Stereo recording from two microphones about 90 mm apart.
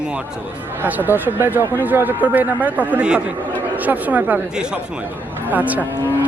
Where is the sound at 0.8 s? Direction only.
20° right (ahead or behind).